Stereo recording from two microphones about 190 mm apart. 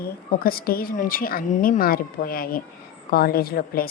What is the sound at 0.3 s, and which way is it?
A woman's voice, 50° left (ahead or behind).